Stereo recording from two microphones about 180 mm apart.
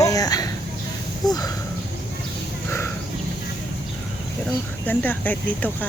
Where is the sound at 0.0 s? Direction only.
20° left (ahead or behind).